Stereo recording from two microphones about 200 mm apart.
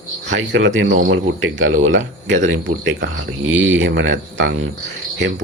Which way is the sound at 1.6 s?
90° right.